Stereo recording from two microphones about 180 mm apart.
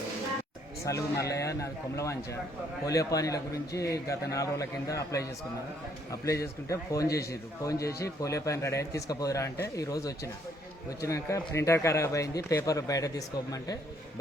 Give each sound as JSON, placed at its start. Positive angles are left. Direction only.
{"t": 0.9, "sound": "a man's voice", "side_deg": 15}